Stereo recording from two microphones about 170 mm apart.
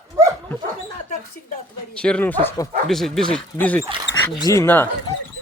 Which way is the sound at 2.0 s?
10° left (ahead or behind).